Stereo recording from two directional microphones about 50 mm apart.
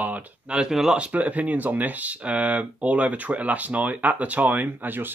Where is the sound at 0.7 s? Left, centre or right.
Centre.